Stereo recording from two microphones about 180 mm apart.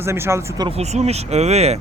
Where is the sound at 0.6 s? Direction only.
35° right (ahead or behind).